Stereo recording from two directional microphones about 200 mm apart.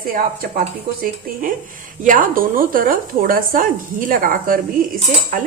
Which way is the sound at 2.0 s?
40° right (ahead or behind).